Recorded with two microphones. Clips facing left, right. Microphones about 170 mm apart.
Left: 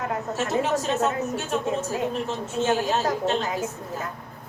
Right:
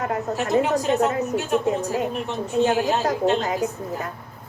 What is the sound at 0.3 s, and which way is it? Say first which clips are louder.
Speech: right 4 dB; 15° right (ahead or behind).